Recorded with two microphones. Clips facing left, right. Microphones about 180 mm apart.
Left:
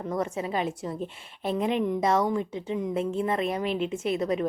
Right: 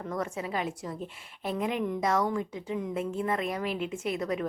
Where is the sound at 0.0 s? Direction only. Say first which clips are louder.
Left 4 dB; 25° left (ahead or behind).